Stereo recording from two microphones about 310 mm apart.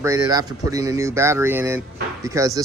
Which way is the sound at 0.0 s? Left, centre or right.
Centre.